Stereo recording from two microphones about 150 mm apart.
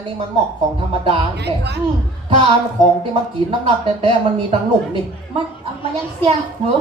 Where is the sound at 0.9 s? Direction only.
35° right (ahead or behind).